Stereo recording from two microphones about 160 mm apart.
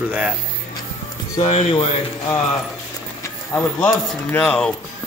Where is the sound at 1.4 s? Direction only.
40° left (ahead or behind).